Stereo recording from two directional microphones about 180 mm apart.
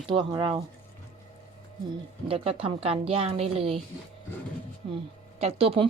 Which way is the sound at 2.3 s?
30° right (ahead or behind).